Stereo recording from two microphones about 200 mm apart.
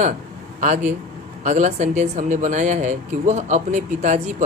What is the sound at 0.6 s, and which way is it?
Speech, 40° right (ahead or behind).